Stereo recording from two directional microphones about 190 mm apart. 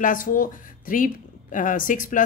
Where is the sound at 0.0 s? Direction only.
45° left (ahead or behind).